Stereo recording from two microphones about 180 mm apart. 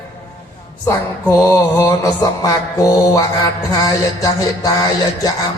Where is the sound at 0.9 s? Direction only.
15° left (ahead or behind).